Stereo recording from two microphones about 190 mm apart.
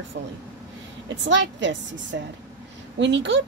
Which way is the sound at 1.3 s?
70° right (ahead or behind).